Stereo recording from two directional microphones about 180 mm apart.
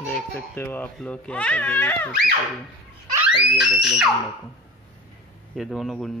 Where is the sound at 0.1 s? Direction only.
10° left (ahead or behind).